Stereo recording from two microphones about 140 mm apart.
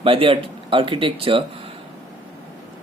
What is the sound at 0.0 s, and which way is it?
Speech, 40° right (ahead or behind).